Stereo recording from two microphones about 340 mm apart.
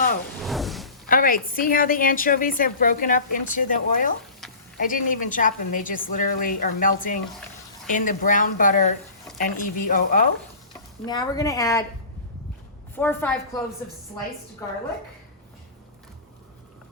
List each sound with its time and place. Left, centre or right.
0.4 s a sound: centre
1.0 s a woman's voice: left
11.0 s speech: centre
13.0 s speech: centre